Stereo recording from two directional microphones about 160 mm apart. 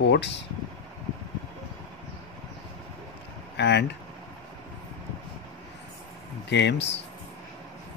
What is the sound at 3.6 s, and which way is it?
Speech, 90° left.